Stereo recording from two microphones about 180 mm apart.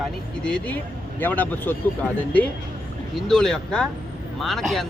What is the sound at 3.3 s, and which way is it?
Speech, 5° left (ahead or behind).